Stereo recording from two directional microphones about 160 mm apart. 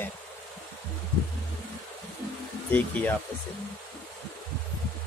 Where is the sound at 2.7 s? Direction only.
10° left (ahead or behind).